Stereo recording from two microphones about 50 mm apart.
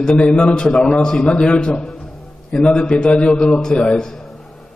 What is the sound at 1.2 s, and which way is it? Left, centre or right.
Speech, left.